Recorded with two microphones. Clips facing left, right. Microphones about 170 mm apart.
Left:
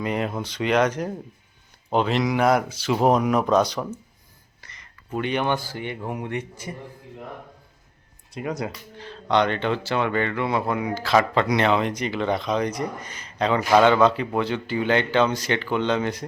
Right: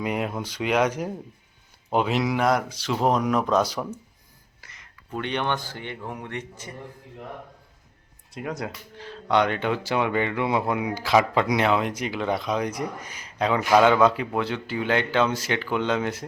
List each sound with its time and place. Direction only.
0.0 s speech: 5° right (ahead or behind)
4.6 s a sound: 5° right (ahead or behind)
5.1 s speech: 5° left (ahead or behind)
8.3 s speech: centre (ahead or behind)